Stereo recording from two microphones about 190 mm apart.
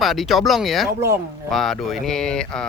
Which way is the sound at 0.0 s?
Centre (ahead or behind).